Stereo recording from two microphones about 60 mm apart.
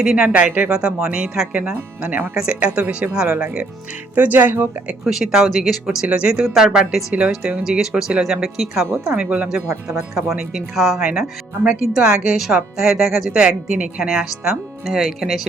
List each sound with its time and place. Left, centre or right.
0.0 s speech: centre; by 4.7 s right
5.0 s speech: centre
9.0 s speech: centre
10.2 s speech: centre